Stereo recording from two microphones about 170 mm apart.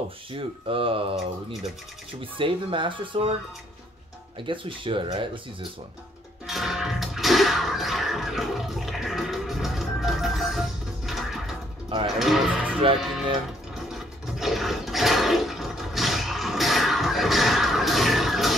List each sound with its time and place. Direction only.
0.3 s speech: 30° right (ahead or behind)
2.3 s speech: 30° right (ahead or behind)
4.5 s speech: 30° right (ahead or behind)
6.4 s music: centre (ahead or behind)
12.2 s speech: centre (ahead or behind)
13.7 s toilet flush: centre (ahead or behind)